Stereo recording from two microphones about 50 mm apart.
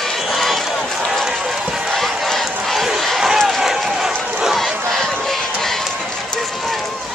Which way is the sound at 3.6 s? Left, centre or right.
Centre.